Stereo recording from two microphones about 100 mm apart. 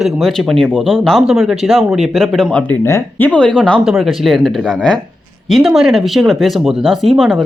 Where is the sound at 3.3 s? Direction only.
10° left (ahead or behind).